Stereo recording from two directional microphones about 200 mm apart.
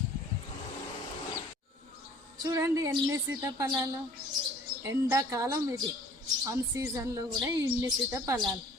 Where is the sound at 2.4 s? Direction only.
20° right (ahead or behind).